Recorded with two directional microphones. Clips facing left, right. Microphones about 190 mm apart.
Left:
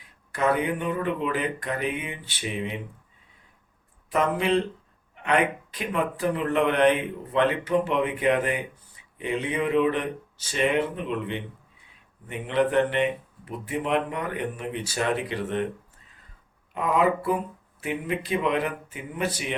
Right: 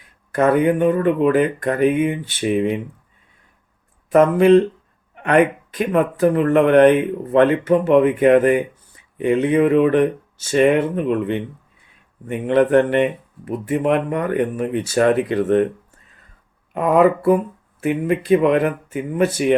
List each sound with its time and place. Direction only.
0.3 s speech: 50° right (ahead or behind)
4.1 s speech: 50° right (ahead or behind)
16.7 s speech: 50° right (ahead or behind)